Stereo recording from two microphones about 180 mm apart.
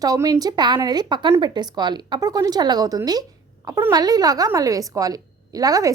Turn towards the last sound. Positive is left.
turn(degrees=-20)  # may be behind; listen again after turning